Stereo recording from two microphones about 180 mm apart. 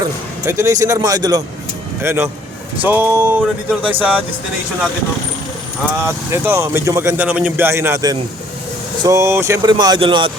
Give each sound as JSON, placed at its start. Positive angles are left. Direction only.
{"t": 0.4, "sound": "a man's voice", "side_deg": -15}
{"t": 6.1, "sound": "a man's voice", "side_deg": -15}